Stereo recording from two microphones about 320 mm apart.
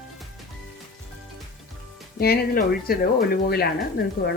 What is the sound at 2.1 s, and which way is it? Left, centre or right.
Speech, left.